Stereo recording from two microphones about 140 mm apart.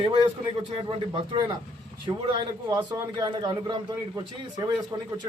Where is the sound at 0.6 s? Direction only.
35° right (ahead or behind).